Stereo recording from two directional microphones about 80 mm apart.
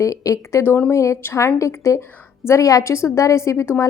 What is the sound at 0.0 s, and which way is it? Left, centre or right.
Speech, left.